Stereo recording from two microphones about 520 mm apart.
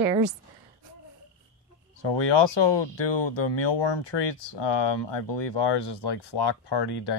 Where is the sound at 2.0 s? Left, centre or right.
Left.